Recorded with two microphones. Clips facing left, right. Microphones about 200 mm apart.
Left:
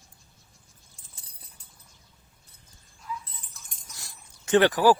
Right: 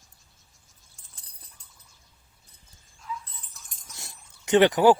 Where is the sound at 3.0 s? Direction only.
Centre (ahead or behind).